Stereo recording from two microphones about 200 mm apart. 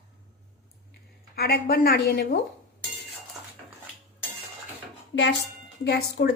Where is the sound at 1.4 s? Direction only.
50° left (ahead or behind).